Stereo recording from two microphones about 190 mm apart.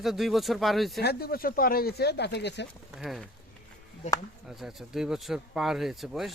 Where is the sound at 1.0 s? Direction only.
55° left (ahead or behind).